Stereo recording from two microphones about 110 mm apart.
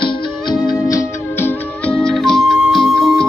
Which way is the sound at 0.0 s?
45° left (ahead or behind).